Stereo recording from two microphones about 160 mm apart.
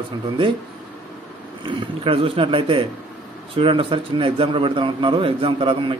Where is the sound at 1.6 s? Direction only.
35° right (ahead or behind).